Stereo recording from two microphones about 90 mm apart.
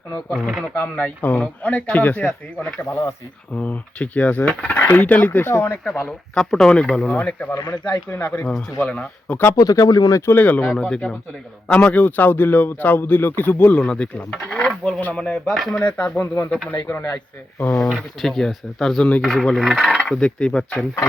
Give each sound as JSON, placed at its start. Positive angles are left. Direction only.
{"t": 0.3, "sound": "speech", "side_deg": 0}
{"t": 0.7, "sound": "speech", "side_deg": 15}
{"t": 2.9, "sound": "a man's voice", "side_deg": 30}
{"t": 3.5, "sound": "a man's voice", "side_deg": 15}
{"t": 5.8, "sound": "speech", "side_deg": 10}
{"t": 7.5, "sound": "speech", "side_deg": 45}
{"t": 8.1, "sound": "a man's voice", "side_deg": 25}
{"t": 8.4, "sound": "speech", "side_deg": 15}
{"t": 9.6, "sound": "speech", "side_deg": 40}
{"t": 10.3, "sound": "a man's voice", "side_deg": 20}
{"t": 10.7, "sound": "a man's voice", "side_deg": 5}
{"t": 15.8, "sound": "speech", "side_deg": 15}
{"t": 17.8, "sound": "speech", "side_deg": 0}